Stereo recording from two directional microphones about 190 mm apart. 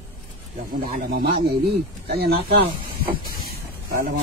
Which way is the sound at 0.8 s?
50° right (ahead or behind).